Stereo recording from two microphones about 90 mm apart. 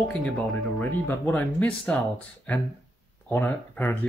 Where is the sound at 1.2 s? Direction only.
15° left (ahead or behind).